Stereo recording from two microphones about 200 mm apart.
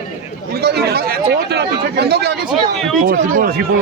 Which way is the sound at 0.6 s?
55° right (ahead or behind).